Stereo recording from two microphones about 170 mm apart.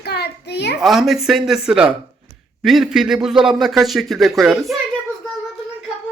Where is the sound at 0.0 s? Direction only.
75° left (ahead or behind).